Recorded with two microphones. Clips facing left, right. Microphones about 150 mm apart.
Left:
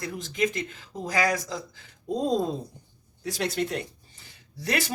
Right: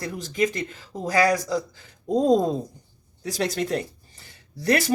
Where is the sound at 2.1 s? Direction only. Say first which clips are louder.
Right 6 dB; 45° right (ahead or behind).